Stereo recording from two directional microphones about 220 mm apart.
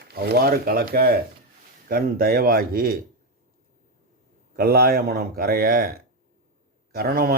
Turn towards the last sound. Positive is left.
turn(degrees=-45)  # may be behind; listen again after turning